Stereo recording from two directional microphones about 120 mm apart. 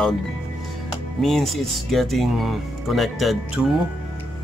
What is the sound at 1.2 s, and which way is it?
Speech, centre (ahead or behind).